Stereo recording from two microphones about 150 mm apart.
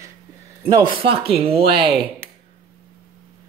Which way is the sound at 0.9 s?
40° right (ahead or behind).